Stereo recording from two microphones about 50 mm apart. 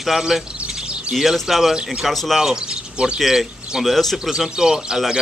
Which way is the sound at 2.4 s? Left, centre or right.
Centre.